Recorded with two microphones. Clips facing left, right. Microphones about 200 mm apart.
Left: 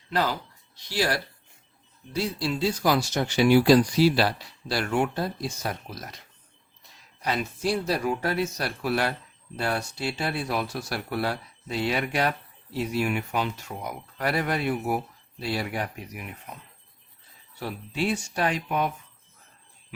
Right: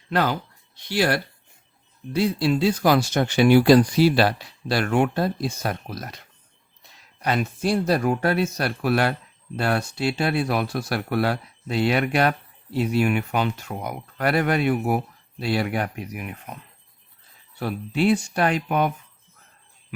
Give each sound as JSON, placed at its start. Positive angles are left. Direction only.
{"t": 0.1, "sound": "speech", "side_deg": -60}
{"t": 7.2, "sound": "speech", "side_deg": -55}
{"t": 17.6, "sound": "speech", "side_deg": -60}